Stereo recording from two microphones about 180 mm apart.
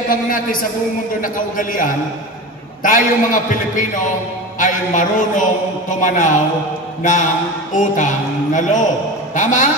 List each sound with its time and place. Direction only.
0.1 s a man's voice: 50° left (ahead or behind)